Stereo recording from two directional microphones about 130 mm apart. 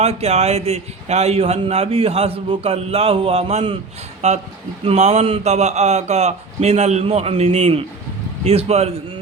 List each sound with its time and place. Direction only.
0.0 s a man's voice: 55° right (ahead or behind)
4.2 s a man's voice: 60° right (ahead or behind)